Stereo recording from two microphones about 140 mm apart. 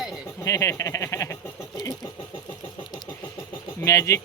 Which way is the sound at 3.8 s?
20° left (ahead or behind).